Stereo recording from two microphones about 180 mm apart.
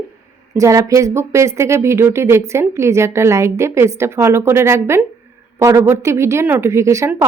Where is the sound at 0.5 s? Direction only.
20° right (ahead or behind).